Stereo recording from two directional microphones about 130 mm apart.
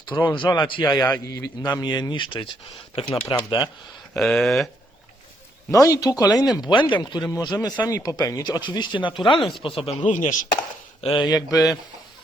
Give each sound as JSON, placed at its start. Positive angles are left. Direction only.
{"t": 0.1, "sound": "a man's voice", "side_deg": 15}
{"t": 0.3, "sound": "speech", "side_deg": 35}
{"t": 1.0, "sound": "a man's voice", "side_deg": 20}
{"t": 1.6, "sound": "speech", "side_deg": 35}
{"t": 4.1, "sound": "speech", "side_deg": 0}
{"t": 5.7, "sound": "speech", "side_deg": 25}
{"t": 7.3, "sound": "speech", "side_deg": 20}
{"t": 9.4, "sound": "speech", "side_deg": 0}
{"t": 9.6, "sound": "speech", "side_deg": 45}
{"t": 10.0, "sound": "chopping", "side_deg": 80}
{"t": 11.1, "sound": "speech", "side_deg": 30}